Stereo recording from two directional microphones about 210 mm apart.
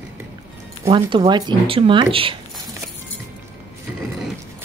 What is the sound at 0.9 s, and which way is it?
A woman's voice, 25° right (ahead or behind).